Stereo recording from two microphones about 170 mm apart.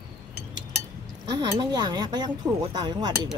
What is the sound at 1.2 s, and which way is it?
Speech, 25° right (ahead or behind).